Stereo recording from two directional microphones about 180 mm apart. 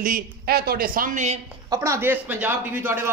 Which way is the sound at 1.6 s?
20° right (ahead or behind).